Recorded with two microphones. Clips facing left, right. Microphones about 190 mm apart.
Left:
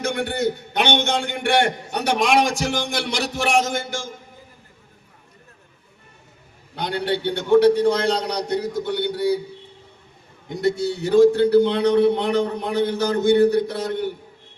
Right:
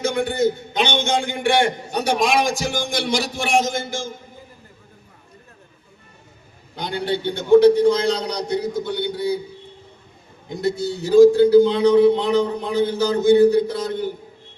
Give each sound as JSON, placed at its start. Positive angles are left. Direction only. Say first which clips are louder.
{"t": 0.0, "sound": "a man's voice", "louder": "right 3 dB", "side_deg": 70}
{"t": 6.7, "sound": "a man's voice", "louder": "even", "side_deg": 65}
{"t": 10.5, "sound": "a man's voice", "louder": "left 1 dB", "side_deg": 70}